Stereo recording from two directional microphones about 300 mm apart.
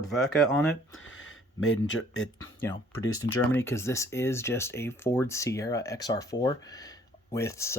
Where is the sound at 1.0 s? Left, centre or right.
Left.